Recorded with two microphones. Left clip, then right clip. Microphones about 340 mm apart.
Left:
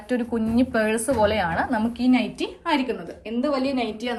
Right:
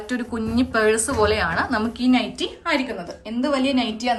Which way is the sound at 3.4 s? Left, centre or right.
Right.